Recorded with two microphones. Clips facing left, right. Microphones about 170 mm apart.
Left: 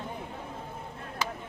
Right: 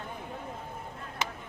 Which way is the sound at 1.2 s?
20° right (ahead or behind).